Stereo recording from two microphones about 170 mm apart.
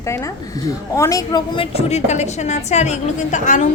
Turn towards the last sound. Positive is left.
turn(degrees=45)  # may be behind; listen again after turning